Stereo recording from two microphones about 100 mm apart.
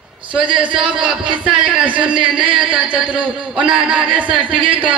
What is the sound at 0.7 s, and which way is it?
Speech, 55° right (ahead or behind).